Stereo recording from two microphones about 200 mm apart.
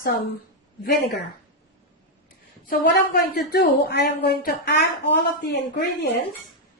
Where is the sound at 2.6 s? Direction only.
45° left (ahead or behind).